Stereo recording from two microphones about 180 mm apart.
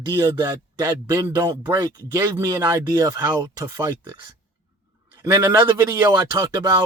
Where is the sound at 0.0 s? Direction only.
20° right (ahead or behind).